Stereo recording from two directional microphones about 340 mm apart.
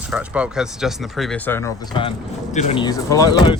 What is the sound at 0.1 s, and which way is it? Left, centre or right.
Speech, centre.